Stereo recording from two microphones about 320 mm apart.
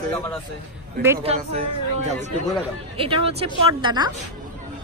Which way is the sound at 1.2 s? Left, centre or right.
Centre.